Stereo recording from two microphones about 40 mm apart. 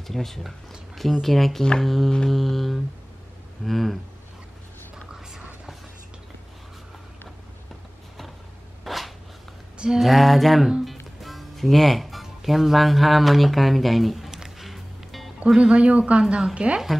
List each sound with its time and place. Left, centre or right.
0.1 s speech: centre
1.2 s a sound: centre
4.9 s whispering: centre
8.8 s a sound: centre
10.9 s speech: centre
14.3 s music: centre
14.7 s music: centre
15.4 s speech: right